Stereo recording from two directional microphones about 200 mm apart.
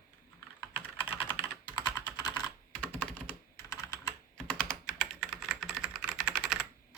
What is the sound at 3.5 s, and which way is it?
Computer keyboard, 15° left (ahead or behind).